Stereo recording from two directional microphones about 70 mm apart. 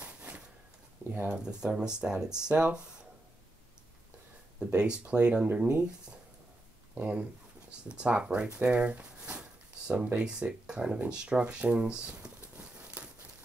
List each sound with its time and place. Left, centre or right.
0.0 s a sound: centre
1.1 s speech: right
1.4 s speech: centre
4.7 s speech: centre